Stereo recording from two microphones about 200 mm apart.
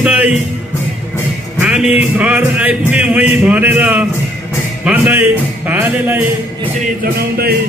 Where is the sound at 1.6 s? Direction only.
5° right (ahead or behind).